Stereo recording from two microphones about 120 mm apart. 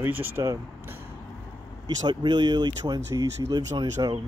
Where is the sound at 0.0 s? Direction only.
15° right (ahead or behind).